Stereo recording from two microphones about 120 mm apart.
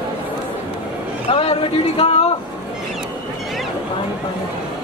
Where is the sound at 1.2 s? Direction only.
50° left (ahead or behind).